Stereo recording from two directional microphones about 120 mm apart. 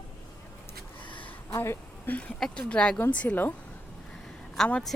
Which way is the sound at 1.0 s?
45° left (ahead or behind).